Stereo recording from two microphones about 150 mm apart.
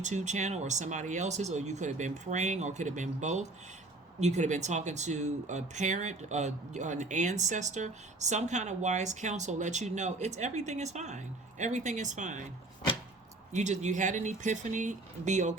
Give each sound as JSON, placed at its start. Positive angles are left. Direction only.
{"t": 0.0, "sound": "speech", "side_deg": -50}
{"t": 13.5, "sound": "speech", "side_deg": -50}